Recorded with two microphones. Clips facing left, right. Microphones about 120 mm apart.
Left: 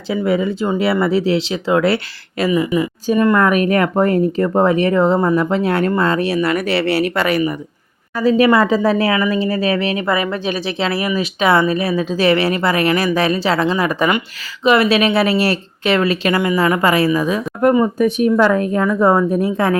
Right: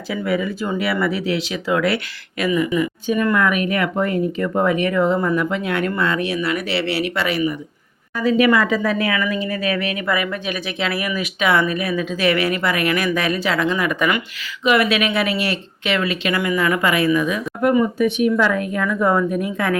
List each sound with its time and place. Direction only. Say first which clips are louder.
0.3 s speech: left 4 dB; 25° left (ahead or behind)
3.3 s speech: left 5 dB; 40° left (ahead or behind)
8.1 s speech: left 3 dB; 35° left (ahead or behind)